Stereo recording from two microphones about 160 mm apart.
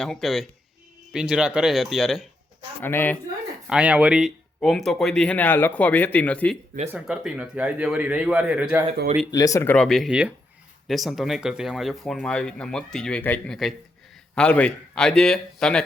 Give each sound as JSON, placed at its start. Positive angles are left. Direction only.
{"t": 0.0, "sound": "speech", "side_deg": 0}
{"t": 2.8, "sound": "speech", "side_deg": 15}
{"t": 3.7, "sound": "speech", "side_deg": -5}
{"t": 6.8, "sound": "speech", "side_deg": -5}
{"t": 9.3, "sound": "speech", "side_deg": 20}
{"t": 9.7, "sound": "speech", "side_deg": 0}